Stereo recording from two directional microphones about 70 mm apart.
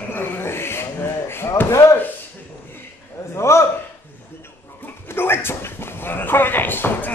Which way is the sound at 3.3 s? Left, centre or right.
Left.